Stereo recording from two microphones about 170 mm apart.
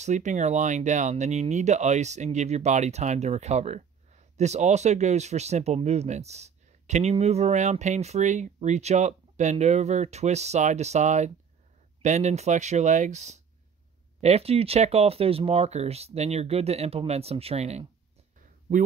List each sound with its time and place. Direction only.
0.0 s speech: 45° right (ahead or behind)